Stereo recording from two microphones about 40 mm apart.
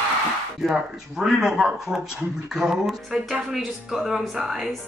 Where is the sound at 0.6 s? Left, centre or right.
Centre.